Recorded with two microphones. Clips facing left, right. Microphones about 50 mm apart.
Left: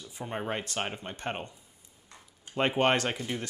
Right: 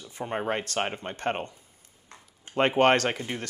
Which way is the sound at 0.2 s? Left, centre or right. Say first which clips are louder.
Right 5 dB; right.